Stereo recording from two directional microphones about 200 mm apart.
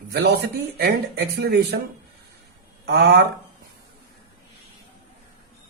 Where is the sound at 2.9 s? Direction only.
55° right (ahead or behind).